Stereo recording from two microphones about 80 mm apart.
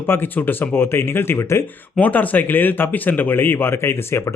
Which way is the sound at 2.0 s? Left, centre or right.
Left.